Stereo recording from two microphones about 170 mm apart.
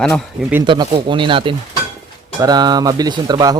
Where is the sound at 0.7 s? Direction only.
30° right (ahead or behind).